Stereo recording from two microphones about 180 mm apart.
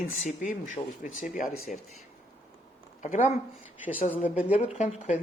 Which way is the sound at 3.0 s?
45° left (ahead or behind).